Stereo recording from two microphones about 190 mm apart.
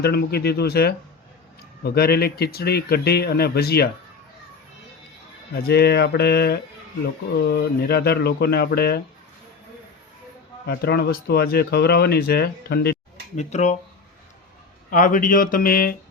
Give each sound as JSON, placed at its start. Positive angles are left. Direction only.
{"t": 0.0, "sound": "speech", "side_deg": 55}
{"t": 5.5, "sound": "speech", "side_deg": 55}
{"t": 10.7, "sound": "speech", "side_deg": 55}
{"t": 13.3, "sound": "speech", "side_deg": 35}
{"t": 14.8, "sound": "speech", "side_deg": 45}